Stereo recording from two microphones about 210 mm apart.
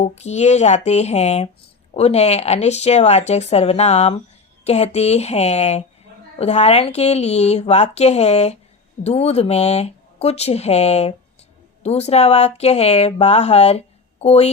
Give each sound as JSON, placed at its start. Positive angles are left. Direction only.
{"t": 0.0, "sound": "speech", "side_deg": 30}